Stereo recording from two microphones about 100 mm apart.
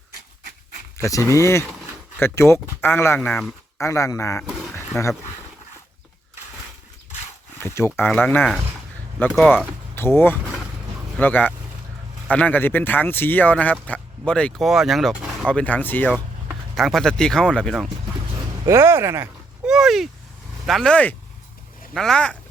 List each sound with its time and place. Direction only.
0.9 s speech: 30° left (ahead or behind)
3.2 s speech: 5° left (ahead or behind)
3.8 s speech: 30° left (ahead or behind)
7.6 s speech: 25° left (ahead or behind)
14.6 s speech: centre (ahead or behind)
15.4 s speech: 10° left (ahead or behind)
16.7 s speech: centre (ahead or behind)
18.6 s speech: 25° right (ahead or behind)
19.6 s speech: 5° right (ahead or behind)
20.9 s speech: 15° left (ahead or behind)